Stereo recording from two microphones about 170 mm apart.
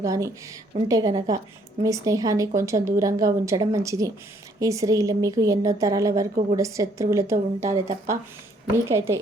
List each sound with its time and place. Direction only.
0.0 s a woman's voice: 20° right (ahead or behind)